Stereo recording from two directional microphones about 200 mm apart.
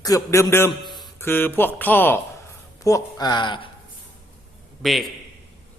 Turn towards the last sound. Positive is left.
turn(degrees=0)  # may be behind; listen again after turning